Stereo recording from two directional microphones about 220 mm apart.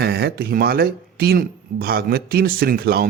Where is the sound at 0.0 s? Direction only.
45° right (ahead or behind).